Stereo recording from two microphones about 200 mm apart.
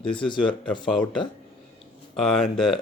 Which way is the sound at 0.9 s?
Centre (ahead or behind).